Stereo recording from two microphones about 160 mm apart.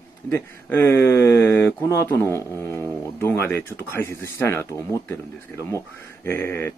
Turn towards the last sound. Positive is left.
turn(degrees=10)  # may be behind; listen again after turning